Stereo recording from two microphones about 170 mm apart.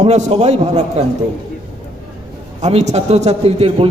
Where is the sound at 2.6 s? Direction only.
40° right (ahead or behind).